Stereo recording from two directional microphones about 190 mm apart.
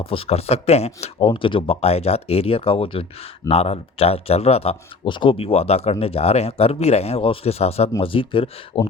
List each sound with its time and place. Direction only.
0.0 s a man's voice: 30° left (ahead or behind)